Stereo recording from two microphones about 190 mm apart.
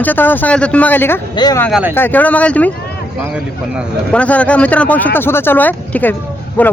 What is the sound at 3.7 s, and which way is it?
Speech, 5° left (ahead or behind).